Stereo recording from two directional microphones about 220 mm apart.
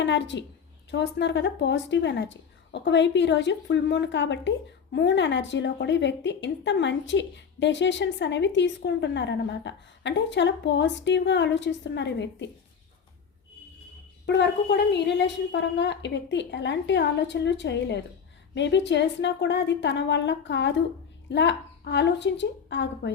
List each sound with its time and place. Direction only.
0.0 s a woman's voice: 55° left (ahead or behind)
14.3 s a woman's voice: 50° left (ahead or behind)